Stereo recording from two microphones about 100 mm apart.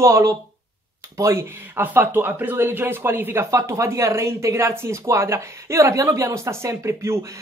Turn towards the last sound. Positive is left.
turn(degrees=-30)  # may be behind; listen again after turning